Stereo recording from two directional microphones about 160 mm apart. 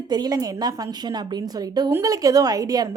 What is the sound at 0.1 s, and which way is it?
A woman's voice, 25° right (ahead or behind).